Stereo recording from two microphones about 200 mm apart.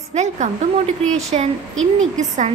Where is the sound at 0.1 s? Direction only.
35° right (ahead or behind).